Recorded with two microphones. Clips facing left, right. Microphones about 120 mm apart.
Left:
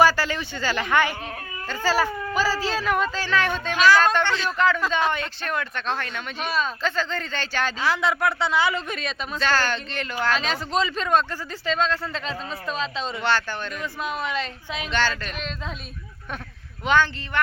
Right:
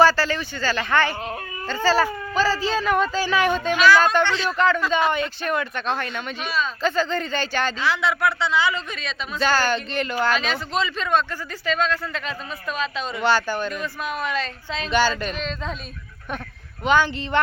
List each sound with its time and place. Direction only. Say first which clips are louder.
0.0 s speech: right 2 dB; 15° left (ahead or behind)
1.6 s baby cry: right 3 dB; 10° left (ahead or behind)
2.3 s speech: right 4 dB; 10° left (ahead or behind)
7.8 s a woman's voice: left 1 dB; 40° left (ahead or behind)
9.4 s speech: right 3 dB; 5° right (ahead or behind)
10.4 s speech: even; 35° left (ahead or behind)
13.1 s speech: right 5 dB; 5° right (ahead or behind)
13.8 s speech: right 1 dB; 20° left (ahead or behind)
14.8 s speech: right 5 dB; 10° right (ahead or behind)
16.8 s speech: right 1 dB; 5° right (ahead or behind)
17.3 s speech: right 3 dB; 25° right (ahead or behind)